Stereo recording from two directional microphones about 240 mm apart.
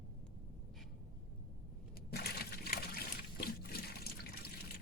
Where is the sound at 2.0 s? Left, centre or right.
Left.